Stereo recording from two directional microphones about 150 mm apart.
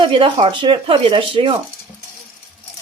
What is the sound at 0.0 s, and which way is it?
Speech, 35° right (ahead or behind).